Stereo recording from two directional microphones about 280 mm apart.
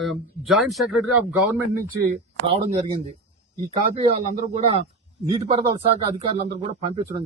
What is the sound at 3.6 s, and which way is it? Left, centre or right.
Speech, right.